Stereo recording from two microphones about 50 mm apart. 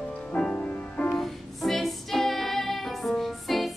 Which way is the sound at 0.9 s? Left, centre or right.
Left.